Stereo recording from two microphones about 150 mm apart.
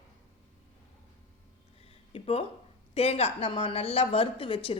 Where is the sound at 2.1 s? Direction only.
40° left (ahead or behind).